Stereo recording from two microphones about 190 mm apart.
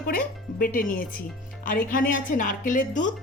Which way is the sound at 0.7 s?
50° left (ahead or behind).